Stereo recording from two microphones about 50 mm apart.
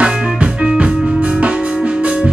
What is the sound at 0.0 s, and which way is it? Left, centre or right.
Music, centre.